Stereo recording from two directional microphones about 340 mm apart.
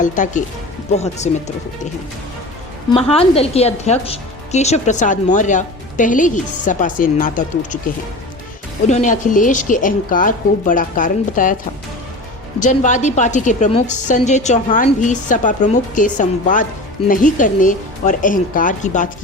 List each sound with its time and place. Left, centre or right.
0.0 s a woman's voice: left
3.1 s a woman's voice: centre
8.9 s a woman's voice: left
12.6 s a woman's voice: left